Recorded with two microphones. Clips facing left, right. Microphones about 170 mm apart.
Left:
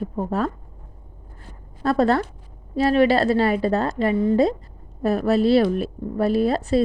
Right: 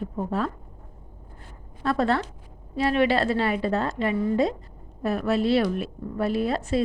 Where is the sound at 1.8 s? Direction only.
40° left (ahead or behind).